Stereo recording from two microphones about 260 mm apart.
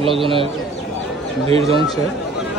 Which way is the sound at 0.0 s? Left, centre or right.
Right.